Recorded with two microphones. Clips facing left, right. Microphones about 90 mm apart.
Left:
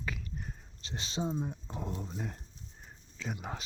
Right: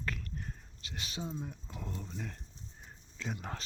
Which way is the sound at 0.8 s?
25° left (ahead or behind).